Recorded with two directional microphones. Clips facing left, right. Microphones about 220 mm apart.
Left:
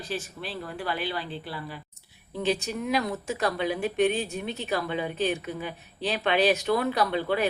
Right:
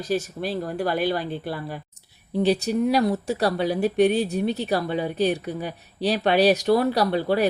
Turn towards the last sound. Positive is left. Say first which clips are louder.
# right 4 dB
turn(degrees=-40)  # may be behind; listen again after turning